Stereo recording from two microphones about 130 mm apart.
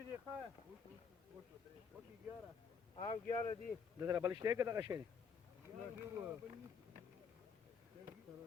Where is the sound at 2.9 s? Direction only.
40° left (ahead or behind).